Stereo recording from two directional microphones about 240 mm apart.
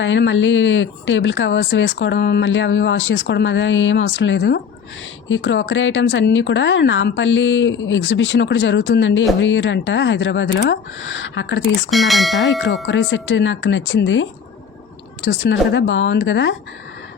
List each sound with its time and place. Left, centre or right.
0.0 s speech: left
11.9 s speech: centre
12.8 s speech: left